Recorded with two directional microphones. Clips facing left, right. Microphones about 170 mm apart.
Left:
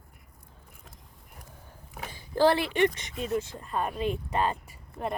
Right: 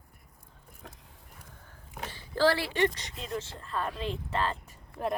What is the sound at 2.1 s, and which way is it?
Speech, 15° left (ahead or behind).